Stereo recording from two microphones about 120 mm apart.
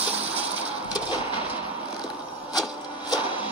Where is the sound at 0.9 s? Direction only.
35° left (ahead or behind).